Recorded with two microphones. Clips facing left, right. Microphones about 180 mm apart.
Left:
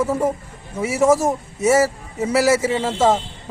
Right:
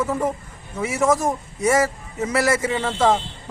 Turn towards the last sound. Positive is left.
turn(degrees=5)  # may be behind; listen again after turning